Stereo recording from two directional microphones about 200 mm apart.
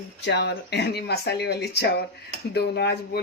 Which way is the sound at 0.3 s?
55° left (ahead or behind).